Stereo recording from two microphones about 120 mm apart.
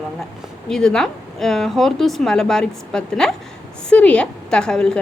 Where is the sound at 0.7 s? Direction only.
5° left (ahead or behind).